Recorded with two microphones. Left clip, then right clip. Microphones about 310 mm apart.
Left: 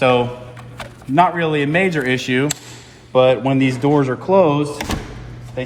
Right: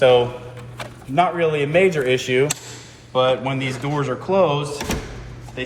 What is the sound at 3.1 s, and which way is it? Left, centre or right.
Speech, left.